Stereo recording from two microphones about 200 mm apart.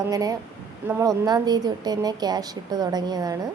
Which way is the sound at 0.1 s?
15° right (ahead or behind).